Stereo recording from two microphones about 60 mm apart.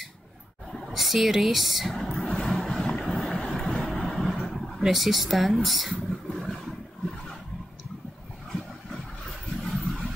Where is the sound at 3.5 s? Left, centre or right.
Centre.